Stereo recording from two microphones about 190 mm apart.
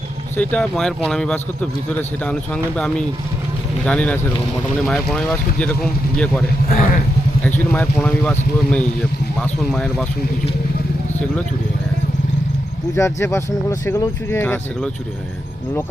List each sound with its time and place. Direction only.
0.3 s speech: 5° left (ahead or behind)
3.8 s speech: 5° left (ahead or behind)
6.7 s speech: 50° left (ahead or behind)
7.4 s speech: 10° left (ahead or behind)
13.0 s speech: 15° left (ahead or behind)